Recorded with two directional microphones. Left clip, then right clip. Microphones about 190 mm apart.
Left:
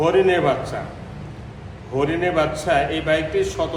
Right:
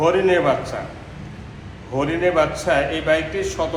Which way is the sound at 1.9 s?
Centre (ahead or behind).